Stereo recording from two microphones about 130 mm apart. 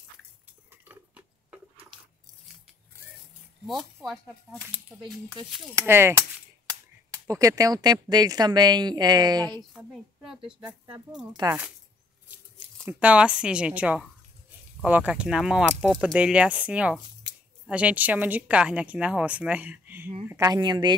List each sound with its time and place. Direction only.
0.7 s cutlery: 15° right (ahead or behind)
3.6 s speech: centre (ahead or behind)
5.9 s speech: 20° right (ahead or behind)
7.2 s a woman's voice: 25° right (ahead or behind)
9.8 s speech: 5° right (ahead or behind)
11.4 s a woman's voice: 30° right (ahead or behind)
13.0 s a woman's voice: 10° right (ahead or behind)
20.2 s speech: 25° right (ahead or behind)